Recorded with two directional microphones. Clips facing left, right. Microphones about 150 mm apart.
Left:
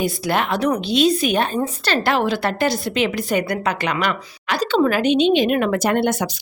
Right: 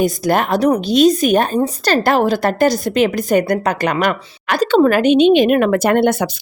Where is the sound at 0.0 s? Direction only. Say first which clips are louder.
Right 5 dB; 45° right (ahead or behind).